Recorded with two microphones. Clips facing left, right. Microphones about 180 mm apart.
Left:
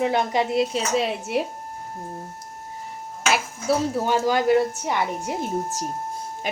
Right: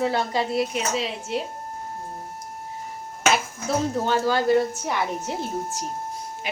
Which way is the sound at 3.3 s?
5° left (ahead or behind).